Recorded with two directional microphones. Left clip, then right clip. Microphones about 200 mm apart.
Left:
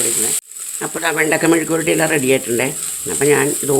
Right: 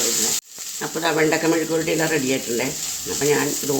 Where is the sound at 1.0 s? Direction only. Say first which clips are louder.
Left 3 dB; 35° left (ahead or behind).